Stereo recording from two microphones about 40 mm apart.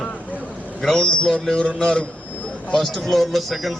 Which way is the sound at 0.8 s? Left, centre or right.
Centre.